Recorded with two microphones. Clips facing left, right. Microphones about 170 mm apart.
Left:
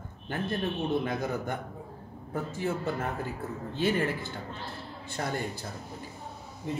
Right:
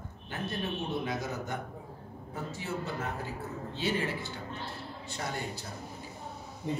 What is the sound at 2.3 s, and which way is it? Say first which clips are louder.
A man's voice: left 5 dB; 50° left (ahead or behind).